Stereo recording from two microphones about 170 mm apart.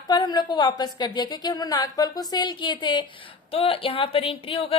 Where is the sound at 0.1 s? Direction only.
25° left (ahead or behind).